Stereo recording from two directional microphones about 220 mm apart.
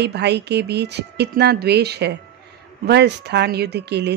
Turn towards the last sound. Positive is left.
turn(degrees=-50)  # may be behind; listen again after turning